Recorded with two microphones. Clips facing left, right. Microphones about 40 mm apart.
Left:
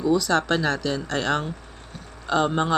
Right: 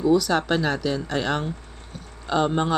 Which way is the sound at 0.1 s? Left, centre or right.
Centre.